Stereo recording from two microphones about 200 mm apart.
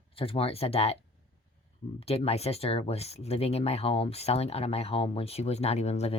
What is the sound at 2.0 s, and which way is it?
Speech, 30° left (ahead or behind).